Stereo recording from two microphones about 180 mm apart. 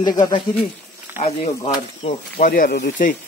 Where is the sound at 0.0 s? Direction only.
25° left (ahead or behind).